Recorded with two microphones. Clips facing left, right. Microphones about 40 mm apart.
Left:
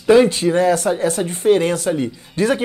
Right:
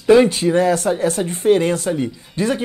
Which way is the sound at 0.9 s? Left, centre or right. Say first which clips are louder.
Even; left.